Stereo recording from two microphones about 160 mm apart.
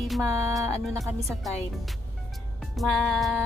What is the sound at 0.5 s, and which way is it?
Speech, centre (ahead or behind).